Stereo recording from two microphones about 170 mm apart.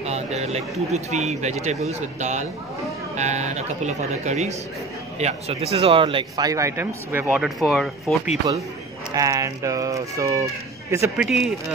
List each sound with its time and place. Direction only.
0.0 s speech: 40° right (ahead or behind); by 7.4 s 10° right (ahead or behind)
7.4 s speech: centre (ahead or behind)
9.1 s speech: 20° right (ahead or behind)
11.1 s speech: centre (ahead or behind)